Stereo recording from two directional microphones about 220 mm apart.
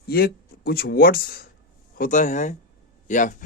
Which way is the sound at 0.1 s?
45° left (ahead or behind).